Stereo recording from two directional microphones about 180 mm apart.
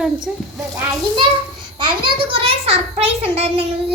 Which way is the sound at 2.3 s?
30° right (ahead or behind).